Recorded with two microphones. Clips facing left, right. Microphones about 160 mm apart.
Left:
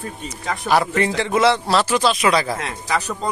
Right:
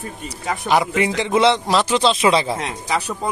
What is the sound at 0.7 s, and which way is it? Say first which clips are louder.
A man's voice: even; 15° right (ahead or behind).